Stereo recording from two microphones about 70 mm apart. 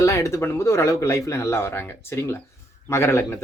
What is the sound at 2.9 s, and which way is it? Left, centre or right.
Speech, left.